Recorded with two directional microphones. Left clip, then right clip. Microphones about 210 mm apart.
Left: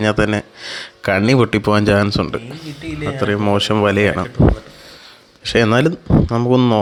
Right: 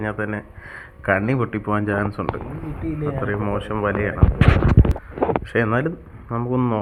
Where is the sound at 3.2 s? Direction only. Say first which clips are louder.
Left 12 dB; 55° left (ahead or behind).